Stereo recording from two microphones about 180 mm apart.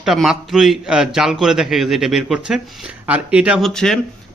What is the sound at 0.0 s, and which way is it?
A man's voice, centre (ahead or behind).